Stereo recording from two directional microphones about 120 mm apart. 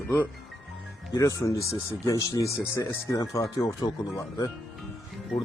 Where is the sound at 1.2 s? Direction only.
30° left (ahead or behind).